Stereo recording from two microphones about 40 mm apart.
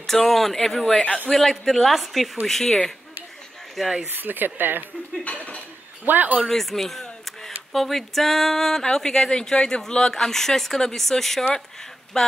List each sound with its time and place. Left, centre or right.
0.0 s a woman's voice: centre
3.8 s a woman's voice: centre
4.1 s speech: right
5.2 s dishes: left
6.0 s speech: right
6.4 s a sound: centre
7.7 s speech: centre